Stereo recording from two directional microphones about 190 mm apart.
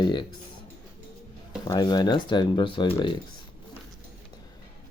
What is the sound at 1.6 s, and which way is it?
Speech, 20° left (ahead or behind).